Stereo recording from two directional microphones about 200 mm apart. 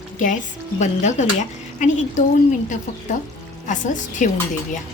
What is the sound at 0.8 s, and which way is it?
Speech, 35° left (ahead or behind).